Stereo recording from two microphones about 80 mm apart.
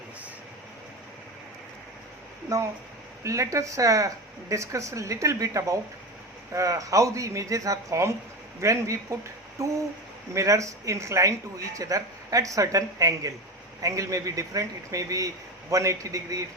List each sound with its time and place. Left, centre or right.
2.5 s speech: right